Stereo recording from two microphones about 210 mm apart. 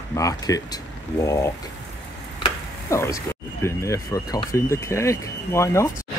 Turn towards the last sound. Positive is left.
turn(degrees=15)  # may be behind; listen again after turning